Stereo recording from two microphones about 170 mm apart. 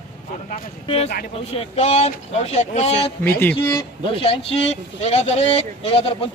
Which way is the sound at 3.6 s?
30° left (ahead or behind).